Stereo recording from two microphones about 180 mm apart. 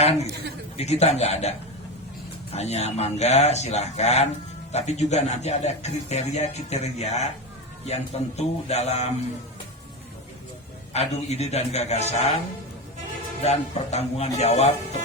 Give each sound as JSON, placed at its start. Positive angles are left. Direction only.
{"t": 0.0, "sound": "a man's voice", "side_deg": 35}
{"t": 10.9, "sound": "speech", "side_deg": 35}
{"t": 13.4, "sound": "speech", "side_deg": 35}